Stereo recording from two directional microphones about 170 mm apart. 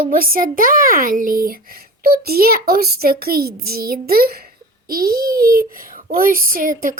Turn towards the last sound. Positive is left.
turn(degrees=-55)  # may be behind; listen again after turning